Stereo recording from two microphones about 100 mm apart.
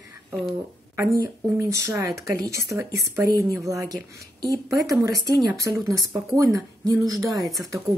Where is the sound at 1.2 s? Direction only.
35° right (ahead or behind).